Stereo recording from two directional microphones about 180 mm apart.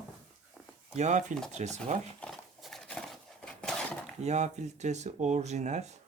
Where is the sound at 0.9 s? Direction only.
40° right (ahead or behind).